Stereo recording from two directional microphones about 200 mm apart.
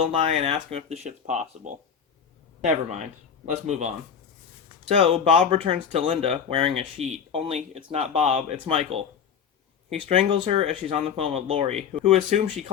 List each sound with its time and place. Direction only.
0.0 s speech: 25° right (ahead or behind)
4.9 s speech: 25° right (ahead or behind)